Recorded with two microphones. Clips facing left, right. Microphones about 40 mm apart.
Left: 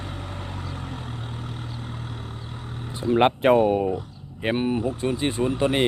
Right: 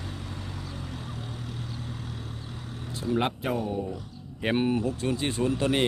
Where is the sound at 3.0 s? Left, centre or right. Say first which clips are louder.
Left 8 dB; left.